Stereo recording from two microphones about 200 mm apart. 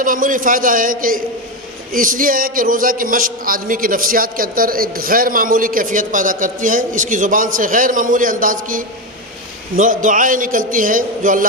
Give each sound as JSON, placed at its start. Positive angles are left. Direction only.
{"t": 0.0, "sound": "a man's voice", "side_deg": -45}